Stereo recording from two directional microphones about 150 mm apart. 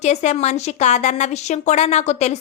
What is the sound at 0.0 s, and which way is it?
Speech, 50° left (ahead or behind).